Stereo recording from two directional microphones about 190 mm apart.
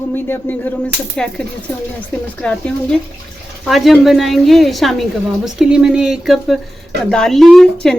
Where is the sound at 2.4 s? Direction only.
5° left (ahead or behind).